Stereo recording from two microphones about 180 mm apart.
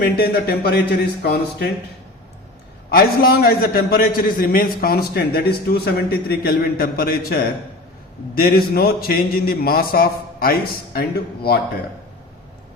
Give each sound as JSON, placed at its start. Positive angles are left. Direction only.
{"t": 0.0, "sound": "a man's voice", "side_deg": 60}
{"t": 2.9, "sound": "a man's voice", "side_deg": 55}